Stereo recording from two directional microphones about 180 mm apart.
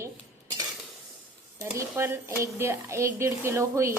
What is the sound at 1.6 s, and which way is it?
Speech, 15° right (ahead or behind).